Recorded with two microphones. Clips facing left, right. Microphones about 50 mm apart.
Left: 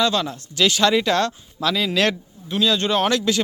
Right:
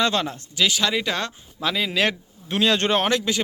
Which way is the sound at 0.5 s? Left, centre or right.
Centre.